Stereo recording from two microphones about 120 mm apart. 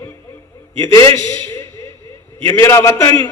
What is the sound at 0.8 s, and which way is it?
Speech, 30° left (ahead or behind).